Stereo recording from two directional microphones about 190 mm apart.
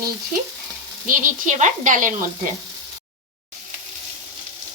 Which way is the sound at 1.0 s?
45° right (ahead or behind).